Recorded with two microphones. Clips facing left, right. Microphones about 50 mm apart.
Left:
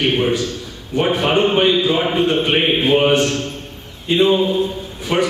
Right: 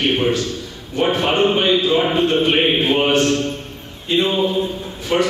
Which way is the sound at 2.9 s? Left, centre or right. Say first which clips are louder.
Left 3 dB; centre.